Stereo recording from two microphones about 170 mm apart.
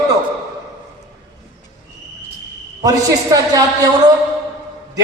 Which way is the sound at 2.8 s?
20° right (ahead or behind).